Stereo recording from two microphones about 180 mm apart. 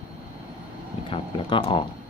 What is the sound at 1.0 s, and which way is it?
Speech, 30° left (ahead or behind).